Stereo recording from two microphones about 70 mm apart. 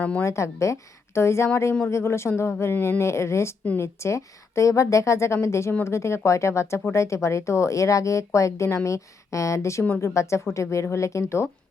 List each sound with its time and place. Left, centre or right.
0.0 s speech: left
0.3 s speech: left